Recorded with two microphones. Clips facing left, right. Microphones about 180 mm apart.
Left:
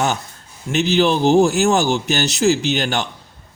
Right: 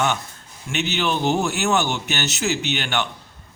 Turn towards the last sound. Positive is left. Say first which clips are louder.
# left 4 dB
turn(degrees=40)  # may be behind; listen again after turning